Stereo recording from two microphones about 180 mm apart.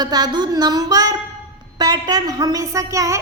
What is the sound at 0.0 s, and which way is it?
Speech, 20° right (ahead or behind).